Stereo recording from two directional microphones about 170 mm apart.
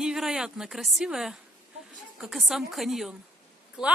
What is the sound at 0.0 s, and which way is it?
A woman's voice, 5° right (ahead or behind).